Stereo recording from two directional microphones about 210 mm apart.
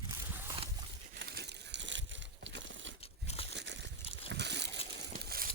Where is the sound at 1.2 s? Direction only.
50° right (ahead or behind).